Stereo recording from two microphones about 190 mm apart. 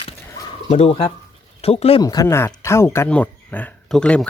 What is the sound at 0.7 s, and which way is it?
Speech, 30° left (ahead or behind).